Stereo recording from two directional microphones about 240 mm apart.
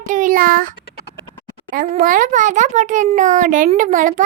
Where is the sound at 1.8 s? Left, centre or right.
Right.